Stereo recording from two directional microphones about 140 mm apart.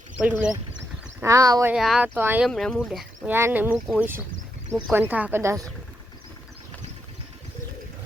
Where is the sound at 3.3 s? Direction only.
15° right (ahead or behind).